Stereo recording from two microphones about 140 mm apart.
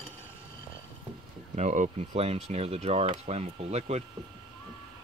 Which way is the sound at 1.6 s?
60° right (ahead or behind).